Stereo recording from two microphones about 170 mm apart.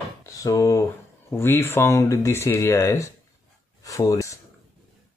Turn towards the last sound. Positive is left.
turn(degrees=20)  # may be behind; listen again after turning